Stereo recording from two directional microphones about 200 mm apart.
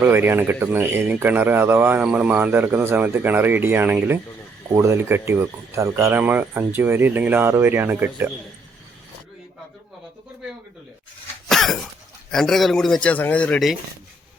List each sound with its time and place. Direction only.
0.0 s speech: 10° right (ahead or behind)
11.4 s throat clearing: centre (ahead or behind)
12.3 s a man's voice: centre (ahead or behind)